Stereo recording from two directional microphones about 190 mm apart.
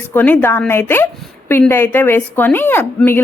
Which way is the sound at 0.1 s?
10° left (ahead or behind).